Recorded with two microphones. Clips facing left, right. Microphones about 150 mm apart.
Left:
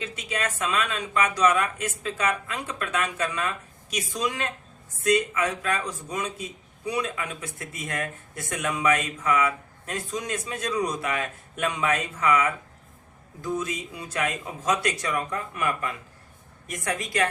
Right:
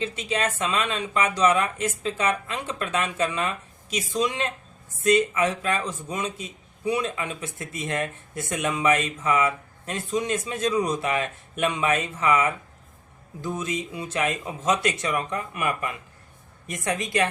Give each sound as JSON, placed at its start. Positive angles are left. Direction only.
{"t": 0.0, "sound": "speech", "side_deg": -25}